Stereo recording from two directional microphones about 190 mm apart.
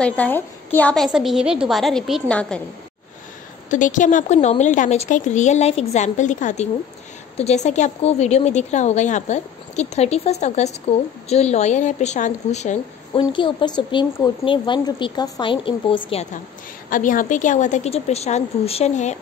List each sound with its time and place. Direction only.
0.0 s a woman's voice: 5° left (ahead or behind)
3.7 s a woman's voice: 40° left (ahead or behind)
13.2 s speech: 25° left (ahead or behind)
16.9 s a woman's voice: 45° left (ahead or behind)